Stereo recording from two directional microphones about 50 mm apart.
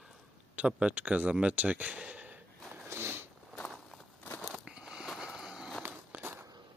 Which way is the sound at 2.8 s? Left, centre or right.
Right.